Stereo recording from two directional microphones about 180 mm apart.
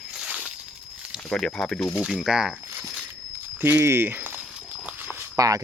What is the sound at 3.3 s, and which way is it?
Walk, 15° right (ahead or behind).